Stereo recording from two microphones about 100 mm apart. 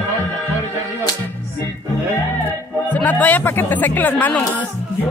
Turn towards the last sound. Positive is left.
turn(degrees=15)  # may be behind; listen again after turning